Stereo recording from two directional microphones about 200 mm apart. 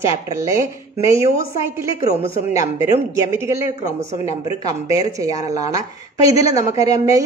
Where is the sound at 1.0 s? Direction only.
15° right (ahead or behind).